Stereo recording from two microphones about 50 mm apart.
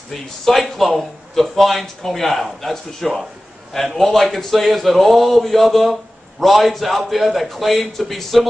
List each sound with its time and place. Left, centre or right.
0.1 s speech: centre